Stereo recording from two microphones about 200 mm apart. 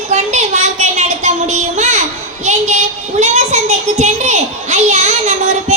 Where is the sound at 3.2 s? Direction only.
35° right (ahead or behind).